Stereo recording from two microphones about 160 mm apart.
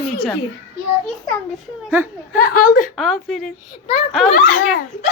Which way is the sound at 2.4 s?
60° left (ahead or behind).